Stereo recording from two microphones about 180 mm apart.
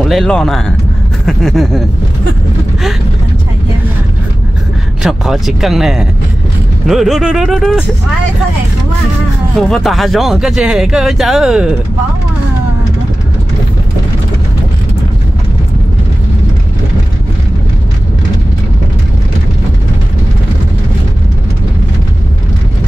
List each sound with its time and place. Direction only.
0.0 s speech: centre (ahead or behind)
5.0 s speech: centre (ahead or behind)
9.6 s speech: centre (ahead or behind)